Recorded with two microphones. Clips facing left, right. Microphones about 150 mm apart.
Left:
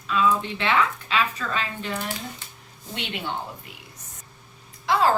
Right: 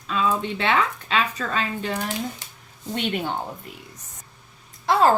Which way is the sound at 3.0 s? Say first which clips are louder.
Right 6 dB; 45° right (ahead or behind).